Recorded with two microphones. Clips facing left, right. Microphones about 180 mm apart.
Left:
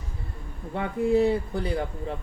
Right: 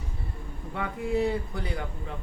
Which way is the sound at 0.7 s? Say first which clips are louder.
Left 6 dB; 30° left (ahead or behind).